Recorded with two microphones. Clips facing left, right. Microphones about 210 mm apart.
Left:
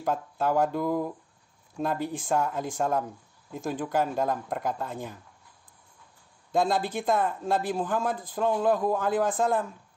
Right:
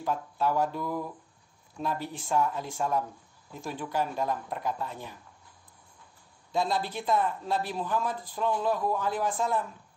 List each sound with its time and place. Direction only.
0.0 s speech: 50° left (ahead or behind)
6.5 s speech: 50° left (ahead or behind)